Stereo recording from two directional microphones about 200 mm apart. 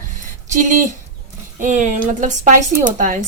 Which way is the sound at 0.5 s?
40° right (ahead or behind).